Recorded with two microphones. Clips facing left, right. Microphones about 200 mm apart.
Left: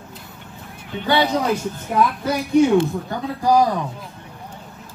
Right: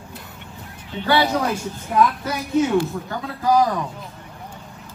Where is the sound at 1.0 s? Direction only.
15° left (ahead or behind).